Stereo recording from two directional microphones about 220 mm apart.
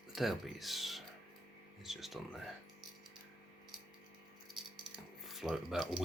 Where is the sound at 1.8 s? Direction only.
Centre (ahead or behind).